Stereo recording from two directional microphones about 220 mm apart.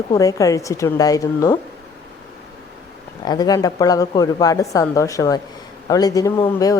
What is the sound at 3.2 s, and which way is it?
A woman's voice, 20° left (ahead or behind).